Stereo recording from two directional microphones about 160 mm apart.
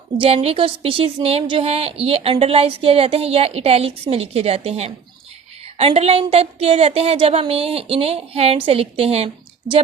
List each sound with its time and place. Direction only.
0.2 s speech: 40° right (ahead or behind)